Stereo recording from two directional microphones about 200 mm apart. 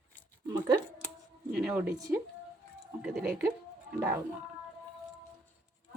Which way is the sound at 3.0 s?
5° right (ahead or behind).